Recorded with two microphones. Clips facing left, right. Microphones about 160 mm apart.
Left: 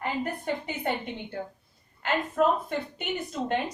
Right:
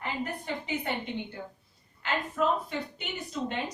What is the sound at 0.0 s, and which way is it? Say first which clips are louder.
Speech: left 4 dB; 50° left (ahead or behind).